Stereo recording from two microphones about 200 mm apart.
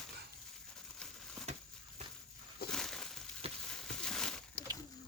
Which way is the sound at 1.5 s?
35° right (ahead or behind).